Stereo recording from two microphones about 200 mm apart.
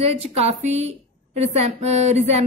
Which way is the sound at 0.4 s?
35° right (ahead or behind).